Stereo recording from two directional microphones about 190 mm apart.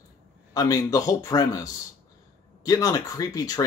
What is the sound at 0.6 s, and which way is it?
A man's voice, 15° left (ahead or behind).